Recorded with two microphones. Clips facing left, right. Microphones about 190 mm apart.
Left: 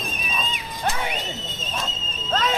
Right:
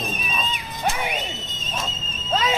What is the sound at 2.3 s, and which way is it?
Horse, 5° right (ahead or behind).